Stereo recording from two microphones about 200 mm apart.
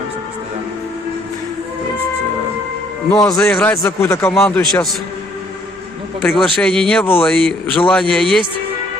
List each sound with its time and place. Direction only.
3.1 s a man's voice: 5° left (ahead or behind)
6.2 s speech: centre (ahead or behind)